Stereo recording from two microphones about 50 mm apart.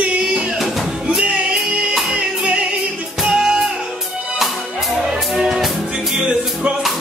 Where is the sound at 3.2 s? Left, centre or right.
Centre.